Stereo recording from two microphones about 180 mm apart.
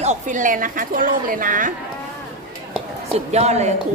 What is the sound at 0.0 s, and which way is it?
A woman's voice, 40° right (ahead or behind).